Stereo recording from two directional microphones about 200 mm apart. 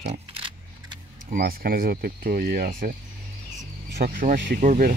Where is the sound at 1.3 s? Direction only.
50° right (ahead or behind).